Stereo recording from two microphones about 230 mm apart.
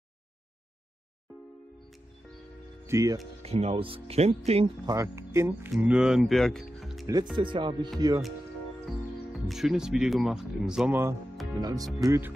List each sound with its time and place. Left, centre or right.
2.9 s speech: centre
3.4 s speech: right
4.9 s speech: centre
7.3 s speech: right
9.3 s speech: centre